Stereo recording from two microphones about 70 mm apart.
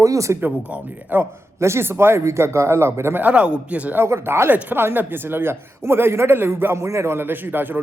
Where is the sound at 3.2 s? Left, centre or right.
Centre.